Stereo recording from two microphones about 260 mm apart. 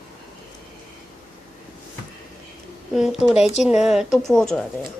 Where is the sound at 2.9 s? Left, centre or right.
Centre.